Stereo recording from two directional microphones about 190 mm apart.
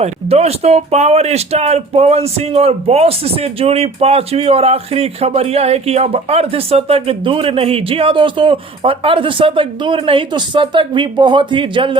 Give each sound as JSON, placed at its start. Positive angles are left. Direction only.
{"t": 0.0, "sound": "speech", "side_deg": -35}